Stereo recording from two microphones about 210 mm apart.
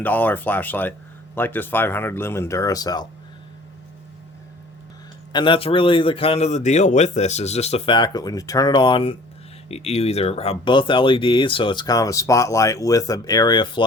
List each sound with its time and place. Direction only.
0.0 s speech: 10° left (ahead or behind)
5.3 s speech: 20° left (ahead or behind)